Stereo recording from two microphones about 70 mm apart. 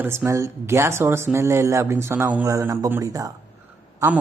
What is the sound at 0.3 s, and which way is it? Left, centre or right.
Speech, right.